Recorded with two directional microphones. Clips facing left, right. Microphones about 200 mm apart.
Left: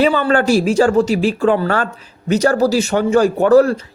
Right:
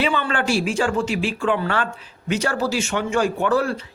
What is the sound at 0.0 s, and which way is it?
Speech, 40° left (ahead or behind).